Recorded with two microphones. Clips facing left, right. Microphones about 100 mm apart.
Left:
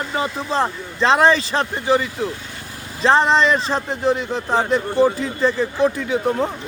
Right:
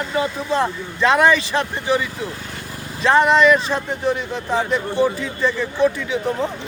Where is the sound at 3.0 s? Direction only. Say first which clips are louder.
Right 1 dB; 30° left (ahead or behind).